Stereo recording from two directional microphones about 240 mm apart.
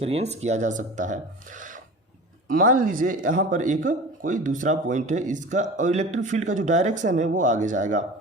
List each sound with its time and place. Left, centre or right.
0.0 s speech: right